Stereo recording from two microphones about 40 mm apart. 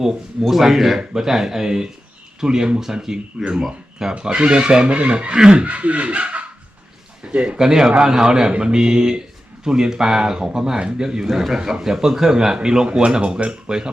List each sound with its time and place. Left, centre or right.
0.5 s a man's voice: centre; by 5.6 s right
5.6 s a man's voice: right